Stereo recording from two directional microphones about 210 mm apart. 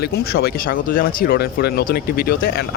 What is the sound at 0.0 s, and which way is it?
Speech, 50° left (ahead or behind).